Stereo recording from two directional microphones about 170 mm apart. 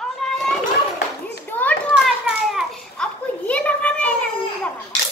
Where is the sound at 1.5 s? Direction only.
10° left (ahead or behind).